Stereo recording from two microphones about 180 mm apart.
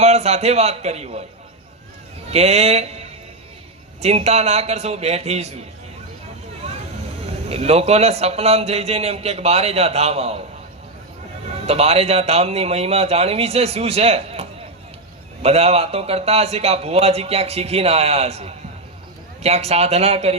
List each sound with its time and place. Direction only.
0.0 s a man's voice: 35° right (ahead or behind)
2.3 s a man's voice: 35° right (ahead or behind)
7.4 s a man's voice: 35° right (ahead or behind)
11.6 s a man's voice: 35° right (ahead or behind)